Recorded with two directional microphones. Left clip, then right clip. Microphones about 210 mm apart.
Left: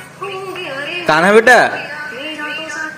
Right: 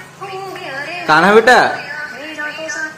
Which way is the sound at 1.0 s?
15° left (ahead or behind).